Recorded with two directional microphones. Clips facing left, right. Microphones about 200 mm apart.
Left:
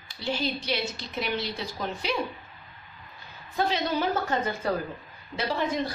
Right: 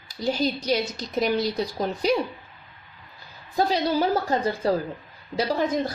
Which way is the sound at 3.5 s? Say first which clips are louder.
Right 4 dB; 35° right (ahead or behind).